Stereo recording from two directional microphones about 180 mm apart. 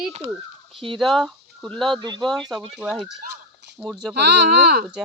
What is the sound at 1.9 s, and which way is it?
Speech, 25° right (ahead or behind).